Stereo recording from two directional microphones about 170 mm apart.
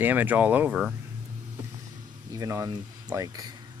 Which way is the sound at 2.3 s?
20° right (ahead or behind).